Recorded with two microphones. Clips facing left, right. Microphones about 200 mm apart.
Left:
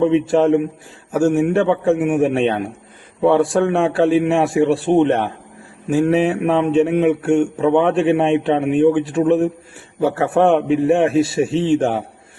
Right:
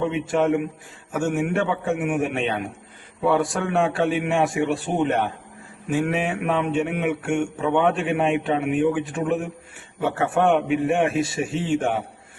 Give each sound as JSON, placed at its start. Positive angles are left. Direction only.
{"t": 0.0, "sound": "a man's voice", "side_deg": 30}